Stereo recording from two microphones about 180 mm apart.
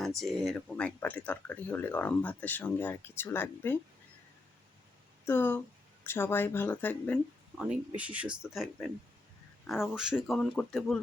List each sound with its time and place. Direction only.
0.2 s speech: centre (ahead or behind)
5.2 s speech: 10° left (ahead or behind)
7.6 s speech: 5° right (ahead or behind)